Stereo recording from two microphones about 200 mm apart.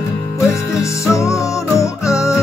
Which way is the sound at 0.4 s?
15° left (ahead or behind).